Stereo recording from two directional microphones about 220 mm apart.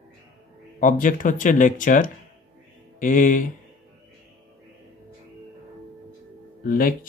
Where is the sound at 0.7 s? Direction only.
35° left (ahead or behind).